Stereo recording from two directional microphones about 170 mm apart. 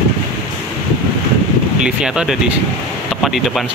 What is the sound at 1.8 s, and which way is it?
Speech, 5° right (ahead or behind).